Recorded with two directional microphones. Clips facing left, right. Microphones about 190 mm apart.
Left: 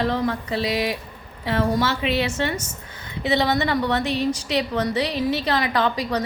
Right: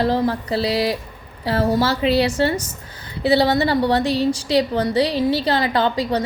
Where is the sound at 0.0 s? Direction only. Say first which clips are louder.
Right 4 dB; 35° right (ahead or behind).